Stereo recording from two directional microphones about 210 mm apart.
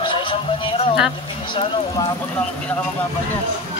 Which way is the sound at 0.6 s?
25° left (ahead or behind).